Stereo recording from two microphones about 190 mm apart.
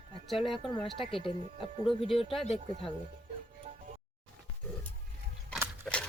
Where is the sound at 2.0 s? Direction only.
30° left (ahead or behind).